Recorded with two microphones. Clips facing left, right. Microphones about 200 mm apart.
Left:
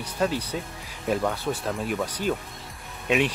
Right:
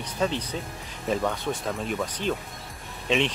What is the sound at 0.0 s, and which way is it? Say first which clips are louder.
Speech: left 1 dB; 10° left (ahead or behind).